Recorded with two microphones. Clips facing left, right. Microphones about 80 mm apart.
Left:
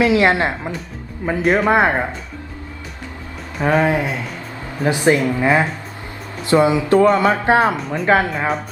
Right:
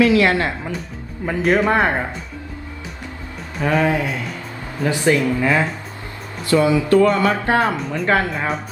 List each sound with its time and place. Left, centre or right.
0.0 s speech: left
1.2 s speech: centre
3.8 s speech: left
7.8 s speech: centre
8.0 s speech: centre
8.3 s speech: centre